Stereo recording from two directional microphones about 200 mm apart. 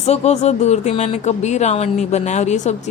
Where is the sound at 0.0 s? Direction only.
35° left (ahead or behind).